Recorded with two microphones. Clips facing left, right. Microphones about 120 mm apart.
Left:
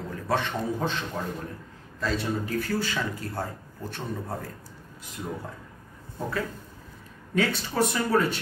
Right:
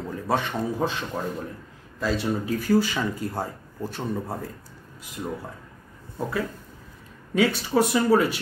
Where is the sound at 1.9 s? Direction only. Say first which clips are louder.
Right 3 dB; 10° right (ahead or behind).